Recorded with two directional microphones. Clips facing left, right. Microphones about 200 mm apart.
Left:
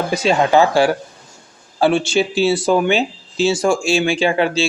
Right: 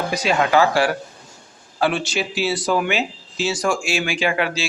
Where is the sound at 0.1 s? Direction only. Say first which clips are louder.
Left 4 dB; 25° left (ahead or behind).